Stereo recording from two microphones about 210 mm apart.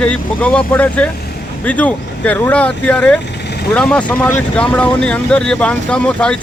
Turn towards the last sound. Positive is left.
turn(degrees=5)  # may be behind; listen again after turning